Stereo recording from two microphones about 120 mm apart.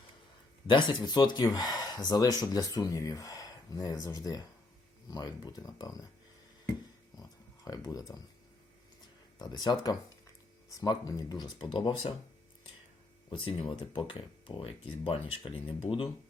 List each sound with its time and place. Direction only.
0.7 s speech: 40° left (ahead or behind)
7.2 s oink: 30° left (ahead or behind)
9.4 s speech: 35° left (ahead or behind)
13.3 s speech: 45° left (ahead or behind)